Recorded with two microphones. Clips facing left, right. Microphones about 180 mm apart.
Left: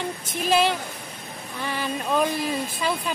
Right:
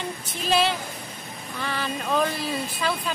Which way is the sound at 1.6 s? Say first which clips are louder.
Left 1 dB; 15° left (ahead or behind).